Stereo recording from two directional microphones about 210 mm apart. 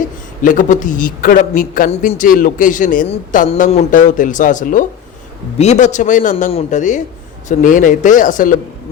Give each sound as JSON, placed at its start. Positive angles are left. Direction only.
{"t": 0.4, "sound": "a man's voice", "side_deg": 40}